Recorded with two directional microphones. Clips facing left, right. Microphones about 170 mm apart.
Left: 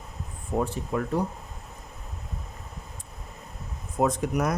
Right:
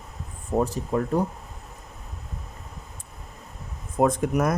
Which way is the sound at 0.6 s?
40° right (ahead or behind).